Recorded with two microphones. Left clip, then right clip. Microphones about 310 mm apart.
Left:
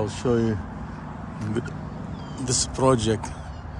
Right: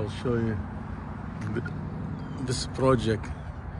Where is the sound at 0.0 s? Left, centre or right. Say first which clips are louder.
Left 6 dB; centre.